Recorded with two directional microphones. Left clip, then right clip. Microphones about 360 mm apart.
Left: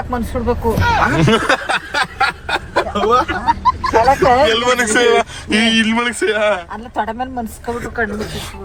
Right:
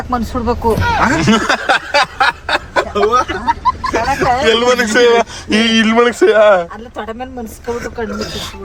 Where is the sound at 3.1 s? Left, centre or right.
Centre.